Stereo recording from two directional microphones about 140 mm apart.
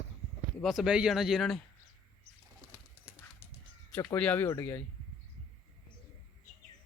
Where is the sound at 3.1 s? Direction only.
10° right (ahead or behind).